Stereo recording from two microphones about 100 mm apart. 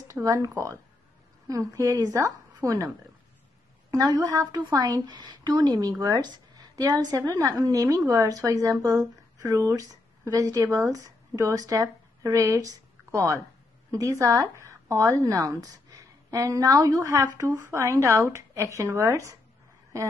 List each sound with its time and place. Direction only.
0.1 s speech: 35° right (ahead or behind)
3.9 s a woman's voice: 40° right (ahead or behind)